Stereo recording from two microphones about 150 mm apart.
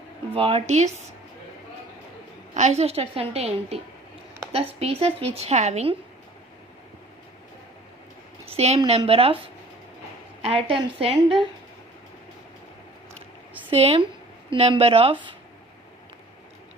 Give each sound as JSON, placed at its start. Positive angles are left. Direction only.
{"t": 0.3, "sound": "a woman's voice", "side_deg": -40}
{"t": 2.6, "sound": "a woman's voice", "side_deg": -45}
{"t": 4.8, "sound": "a woman's voice", "side_deg": -40}
{"t": 8.4, "sound": "a woman's voice", "side_deg": -45}
{"t": 10.4, "sound": "a woman's voice", "side_deg": -40}
{"t": 13.7, "sound": "a woman's voice", "side_deg": -40}